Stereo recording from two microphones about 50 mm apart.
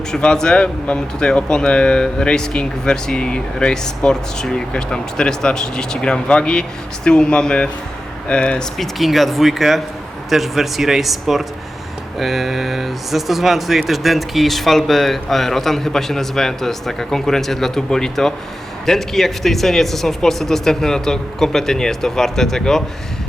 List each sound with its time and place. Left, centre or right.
0.1 s speech: centre
8.8 s speech: centre